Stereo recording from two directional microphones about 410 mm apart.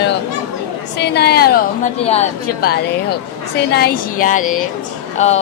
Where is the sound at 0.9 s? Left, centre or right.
Left.